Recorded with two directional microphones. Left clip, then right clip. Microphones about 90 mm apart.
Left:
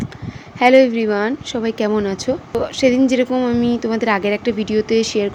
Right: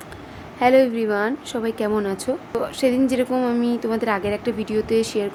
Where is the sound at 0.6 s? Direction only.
30° left (ahead or behind).